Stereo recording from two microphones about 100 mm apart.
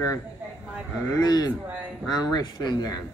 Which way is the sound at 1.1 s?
40° left (ahead or behind).